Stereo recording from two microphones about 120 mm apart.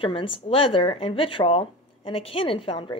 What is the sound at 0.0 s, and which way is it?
Speech, 50° left (ahead or behind).